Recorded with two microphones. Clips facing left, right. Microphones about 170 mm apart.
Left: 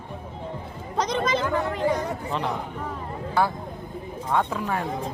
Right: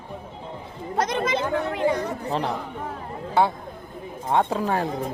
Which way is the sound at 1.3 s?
65° right (ahead or behind).